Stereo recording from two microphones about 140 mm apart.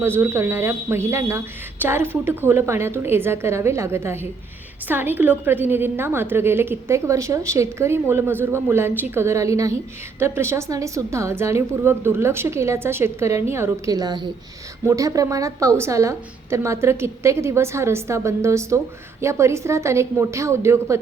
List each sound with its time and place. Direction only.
0.0 s a woman's voice: 20° right (ahead or behind)